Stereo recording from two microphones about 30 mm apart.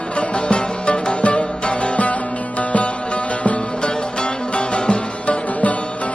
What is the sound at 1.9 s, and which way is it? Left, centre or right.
Music, left.